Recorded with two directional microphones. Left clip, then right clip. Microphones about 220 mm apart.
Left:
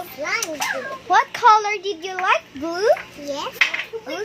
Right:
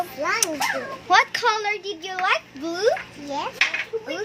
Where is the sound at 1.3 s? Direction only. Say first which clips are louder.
Left 7 dB; 55° left (ahead or behind).